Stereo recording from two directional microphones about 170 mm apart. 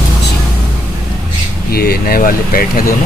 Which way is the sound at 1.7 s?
60° left (ahead or behind).